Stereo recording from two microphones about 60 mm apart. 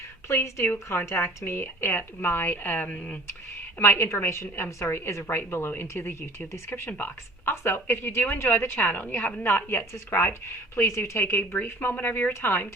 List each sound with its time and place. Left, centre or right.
0.3 s a woman's voice: left
3.8 s a woman's voice: left